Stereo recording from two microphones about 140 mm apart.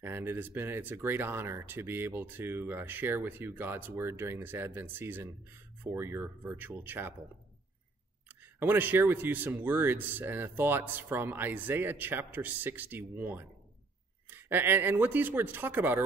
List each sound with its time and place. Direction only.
0.0 s speech: 15° right (ahead or behind)
8.5 s speech: 15° right (ahead or behind)